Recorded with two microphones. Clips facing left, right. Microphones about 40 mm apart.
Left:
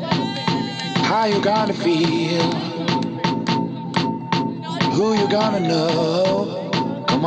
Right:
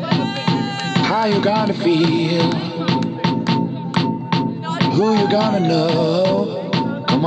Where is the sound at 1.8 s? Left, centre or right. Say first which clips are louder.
Right 5 dB; right.